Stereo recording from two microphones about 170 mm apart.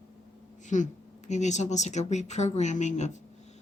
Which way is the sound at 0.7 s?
45° left (ahead or behind).